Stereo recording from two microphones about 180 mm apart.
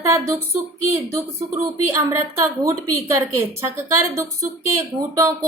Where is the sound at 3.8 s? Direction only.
15° right (ahead or behind).